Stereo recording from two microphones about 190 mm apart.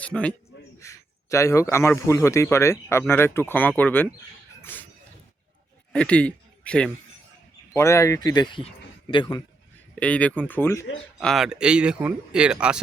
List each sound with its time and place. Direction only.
0.0 s a man's voice: 5° left (ahead or behind)
4.6 s a sound: 10° left (ahead or behind)
5.9 s speech: 5° left (ahead or behind); by 9.4 s 25° left (ahead or behind)
9.9 s speech: 5° left (ahead or behind)
11.2 s speech: centre (ahead or behind)